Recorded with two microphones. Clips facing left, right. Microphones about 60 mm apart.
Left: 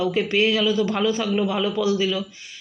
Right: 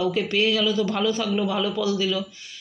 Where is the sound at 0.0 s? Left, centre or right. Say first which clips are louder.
Left 2 dB; centre.